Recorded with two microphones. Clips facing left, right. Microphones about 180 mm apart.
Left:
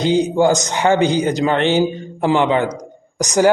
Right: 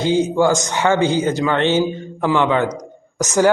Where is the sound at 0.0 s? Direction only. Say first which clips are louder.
Left 1 dB; 15° left (ahead or behind).